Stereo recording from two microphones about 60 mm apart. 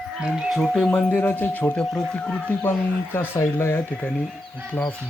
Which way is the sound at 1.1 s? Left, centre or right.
Left.